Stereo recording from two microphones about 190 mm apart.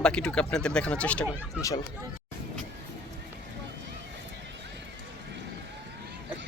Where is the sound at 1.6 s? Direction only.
15° left (ahead or behind).